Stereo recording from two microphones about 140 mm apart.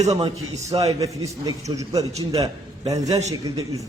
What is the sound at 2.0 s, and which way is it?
Speech, 50° right (ahead or behind).